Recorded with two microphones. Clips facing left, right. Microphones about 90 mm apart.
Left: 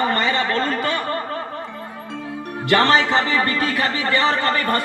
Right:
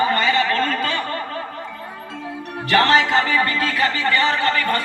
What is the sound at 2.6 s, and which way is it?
A man's voice, 25° left (ahead or behind).